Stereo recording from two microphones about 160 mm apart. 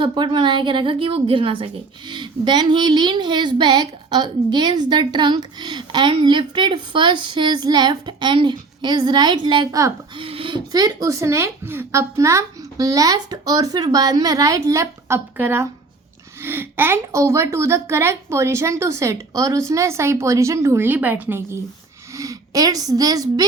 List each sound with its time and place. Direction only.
0.0 s a woman's voice: 30° right (ahead or behind)